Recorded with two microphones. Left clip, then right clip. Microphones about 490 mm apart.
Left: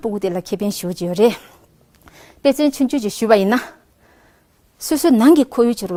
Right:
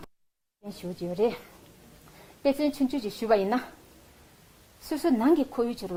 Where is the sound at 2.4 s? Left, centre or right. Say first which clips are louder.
Left 10 dB; left.